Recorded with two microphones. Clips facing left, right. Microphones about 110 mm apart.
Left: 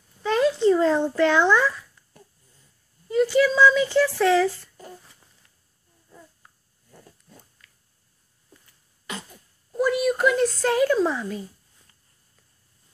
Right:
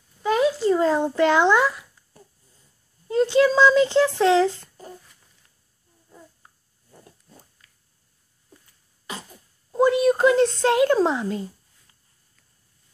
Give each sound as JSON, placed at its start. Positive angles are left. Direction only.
{"t": 0.2, "sound": "a sound", "side_deg": -5}
{"t": 3.1, "sound": "speech", "side_deg": -30}
{"t": 6.0, "sound": "babbling", "side_deg": -15}
{"t": 7.1, "sound": "dog", "side_deg": -10}
{"t": 9.0, "sound": "a sound", "side_deg": -30}
{"t": 11.1, "sound": "speech", "side_deg": -20}